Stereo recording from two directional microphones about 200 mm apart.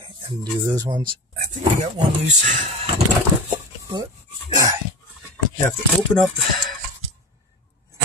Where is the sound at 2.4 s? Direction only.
35° right (ahead or behind).